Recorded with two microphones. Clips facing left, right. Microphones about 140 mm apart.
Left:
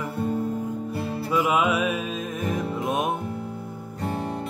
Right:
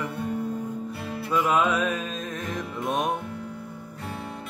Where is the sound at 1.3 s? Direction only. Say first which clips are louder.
Left 1 dB; 5° left (ahead or behind).